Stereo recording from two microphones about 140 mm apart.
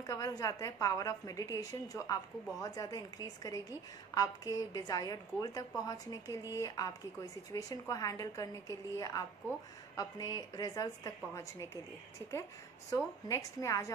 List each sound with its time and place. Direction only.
0.0 s a woman's voice: 25° left (ahead or behind)
12.9 s a woman's voice: 20° left (ahead or behind)